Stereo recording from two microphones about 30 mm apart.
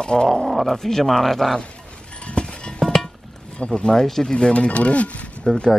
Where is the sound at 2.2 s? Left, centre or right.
Left.